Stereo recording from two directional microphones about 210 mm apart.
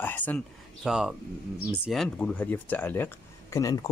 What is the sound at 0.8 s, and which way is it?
Speech, centre (ahead or behind).